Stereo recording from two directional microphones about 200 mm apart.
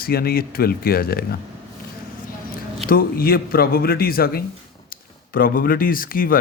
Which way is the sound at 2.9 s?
45° left (ahead or behind).